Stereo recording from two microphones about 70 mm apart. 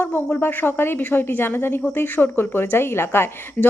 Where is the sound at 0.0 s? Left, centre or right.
Left.